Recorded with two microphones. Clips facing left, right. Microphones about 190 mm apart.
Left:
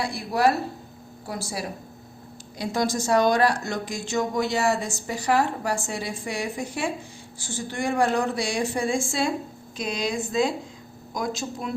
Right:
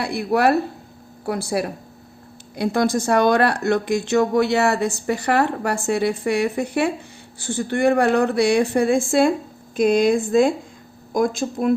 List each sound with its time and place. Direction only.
0.0 s a woman's voice: 60° right (ahead or behind)